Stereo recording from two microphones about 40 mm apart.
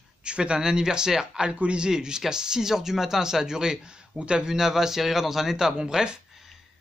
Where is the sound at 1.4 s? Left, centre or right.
Right.